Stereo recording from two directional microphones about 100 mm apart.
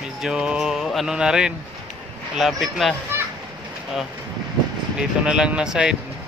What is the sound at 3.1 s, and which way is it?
Children playing, 25° right (ahead or behind).